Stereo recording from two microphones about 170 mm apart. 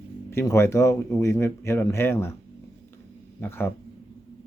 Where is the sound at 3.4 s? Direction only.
15° left (ahead or behind).